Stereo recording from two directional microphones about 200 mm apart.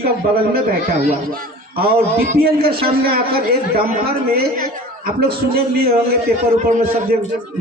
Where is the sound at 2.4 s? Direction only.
50° right (ahead or behind).